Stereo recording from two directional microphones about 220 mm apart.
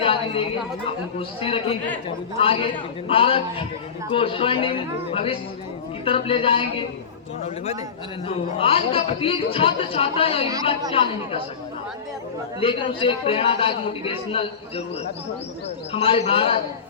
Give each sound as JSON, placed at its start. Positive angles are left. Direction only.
{"t": 0.0, "sound": "a sound", "side_deg": 25}
{"t": 1.4, "sound": "a man's voice", "side_deg": 25}
{"t": 12.5, "sound": "a man's voice", "side_deg": 25}
{"t": 15.9, "sound": "a man's voice", "side_deg": 25}